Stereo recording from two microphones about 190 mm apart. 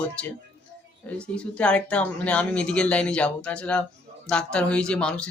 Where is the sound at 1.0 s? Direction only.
5° left (ahead or behind).